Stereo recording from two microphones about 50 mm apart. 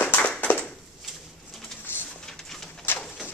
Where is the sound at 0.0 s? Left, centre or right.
Left.